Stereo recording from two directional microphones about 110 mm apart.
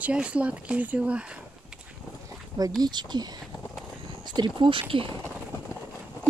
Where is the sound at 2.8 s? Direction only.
40° right (ahead or behind).